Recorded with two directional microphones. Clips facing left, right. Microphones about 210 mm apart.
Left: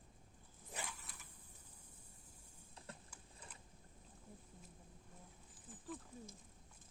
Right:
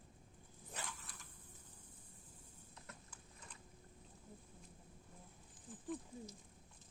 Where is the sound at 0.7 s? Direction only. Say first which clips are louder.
Left 1 dB; 10° left (ahead or behind).